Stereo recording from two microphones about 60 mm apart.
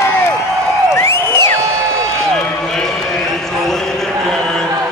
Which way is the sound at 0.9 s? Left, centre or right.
Left.